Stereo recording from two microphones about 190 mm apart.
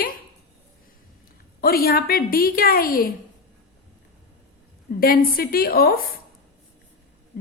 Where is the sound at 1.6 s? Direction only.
50° left (ahead or behind).